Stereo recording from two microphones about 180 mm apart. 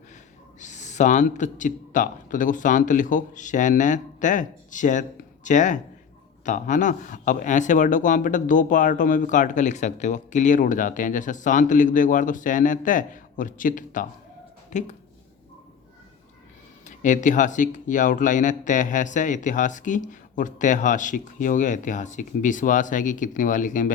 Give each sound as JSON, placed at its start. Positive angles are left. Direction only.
{"t": 0.6, "sound": "speech", "side_deg": 40}
{"t": 16.8, "sound": "speech", "side_deg": 45}